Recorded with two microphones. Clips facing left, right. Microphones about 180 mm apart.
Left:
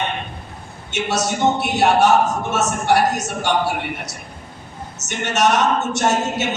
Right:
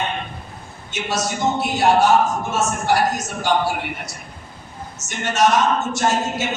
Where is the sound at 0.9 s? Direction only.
70° left (ahead or behind).